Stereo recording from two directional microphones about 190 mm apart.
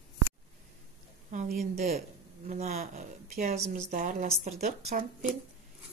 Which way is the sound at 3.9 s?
40° right (ahead or behind).